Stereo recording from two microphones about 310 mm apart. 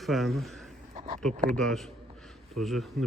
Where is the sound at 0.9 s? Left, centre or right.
Right.